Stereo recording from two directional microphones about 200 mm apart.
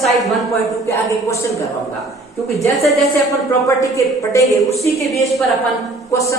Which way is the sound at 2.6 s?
Centre (ahead or behind).